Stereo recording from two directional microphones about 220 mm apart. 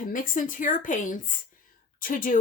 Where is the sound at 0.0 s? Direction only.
40° left (ahead or behind).